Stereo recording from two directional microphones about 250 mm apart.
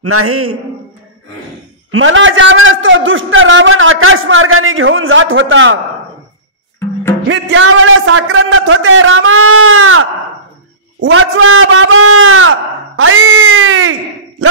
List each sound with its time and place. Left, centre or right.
0.0 s a man's voice: right
1.9 s a man's voice: right
7.2 s a man's voice: right